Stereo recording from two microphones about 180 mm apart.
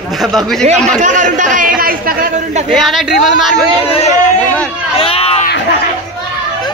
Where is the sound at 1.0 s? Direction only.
45° right (ahead or behind).